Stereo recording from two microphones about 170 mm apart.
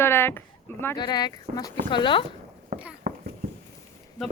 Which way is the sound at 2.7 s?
55° right (ahead or behind).